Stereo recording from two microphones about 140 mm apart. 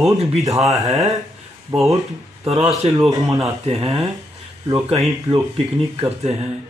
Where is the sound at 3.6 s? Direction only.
40° right (ahead or behind).